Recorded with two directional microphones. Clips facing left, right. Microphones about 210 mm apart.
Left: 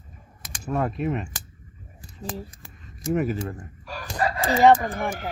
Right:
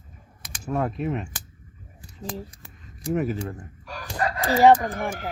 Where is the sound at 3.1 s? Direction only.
Centre (ahead or behind).